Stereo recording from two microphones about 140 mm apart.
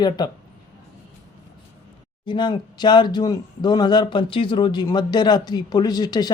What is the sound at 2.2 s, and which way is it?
Speech, 35° left (ahead or behind).